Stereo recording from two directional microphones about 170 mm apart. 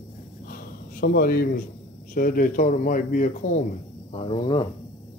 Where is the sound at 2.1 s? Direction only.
55° left (ahead or behind).